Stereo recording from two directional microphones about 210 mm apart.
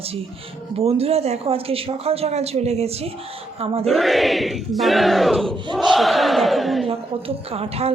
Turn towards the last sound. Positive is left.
turn(degrees=-30)  # may be behind; listen again after turning